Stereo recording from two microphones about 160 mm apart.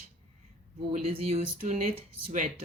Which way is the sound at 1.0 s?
40° right (ahead or behind).